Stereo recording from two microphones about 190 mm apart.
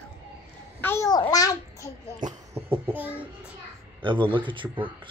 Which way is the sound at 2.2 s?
40° right (ahead or behind).